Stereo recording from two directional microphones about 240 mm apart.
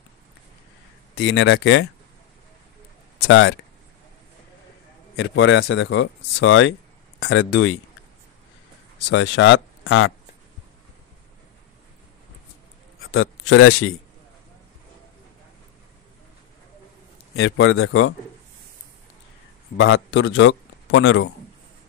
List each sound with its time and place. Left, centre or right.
1.1 s speech: left
3.3 s speech: left
5.1 s speech: left
9.1 s speech: left
13.0 s a man's voice: left
17.4 s a man's voice: left
19.8 s a man's voice: left